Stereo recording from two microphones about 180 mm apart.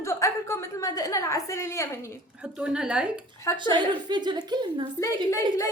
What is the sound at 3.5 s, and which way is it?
A woman's voice, 25° right (ahead or behind).